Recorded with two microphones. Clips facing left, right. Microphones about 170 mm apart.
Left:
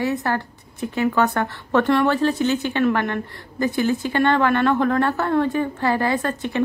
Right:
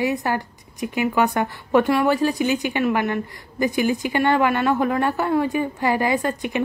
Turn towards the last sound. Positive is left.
turn(degrees=-15)  # may be behind; listen again after turning